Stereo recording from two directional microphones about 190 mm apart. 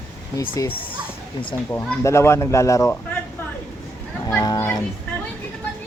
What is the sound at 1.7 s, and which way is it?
Speech, 15° left (ahead or behind).